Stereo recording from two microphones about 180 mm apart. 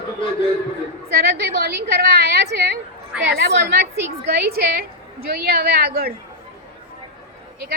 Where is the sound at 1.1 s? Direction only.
65° right (ahead or behind).